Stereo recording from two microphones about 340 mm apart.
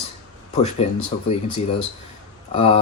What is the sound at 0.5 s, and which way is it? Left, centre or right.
Speech, centre.